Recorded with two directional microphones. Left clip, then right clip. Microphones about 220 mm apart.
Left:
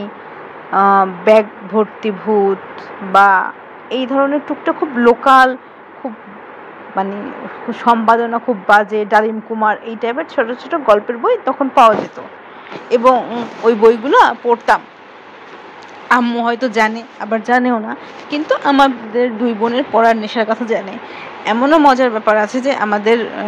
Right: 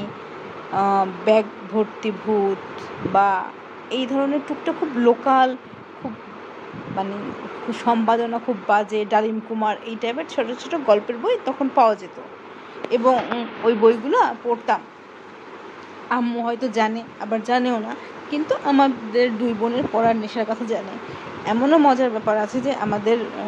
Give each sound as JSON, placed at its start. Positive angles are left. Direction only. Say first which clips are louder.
{"t": 0.7, "sound": "a woman's voice", "louder": "left 8 dB", "side_deg": 5}
{"t": 7.0, "sound": "a woman's voice", "louder": "left 7 dB", "side_deg": 10}
{"t": 12.9, "sound": "speech", "louder": "left 7 dB", "side_deg": 15}
{"t": 16.1, "sound": "a woman's voice", "louder": "left 9 dB", "side_deg": 5}
{"t": 19.1, "sound": "speech", "louder": "left 2 dB", "side_deg": -15}
{"t": 19.6, "sound": "speech", "louder": "left 8 dB", "side_deg": 15}